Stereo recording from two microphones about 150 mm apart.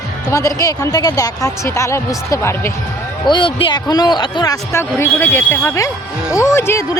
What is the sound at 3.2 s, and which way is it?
Speech, 35° left (ahead or behind).